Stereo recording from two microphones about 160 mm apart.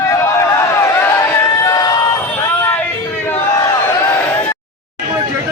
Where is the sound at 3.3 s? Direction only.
15° left (ahead or behind).